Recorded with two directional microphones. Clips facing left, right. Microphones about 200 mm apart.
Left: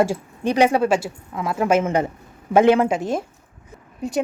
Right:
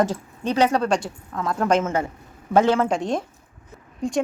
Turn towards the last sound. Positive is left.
turn(degrees=5)  # may be behind; listen again after turning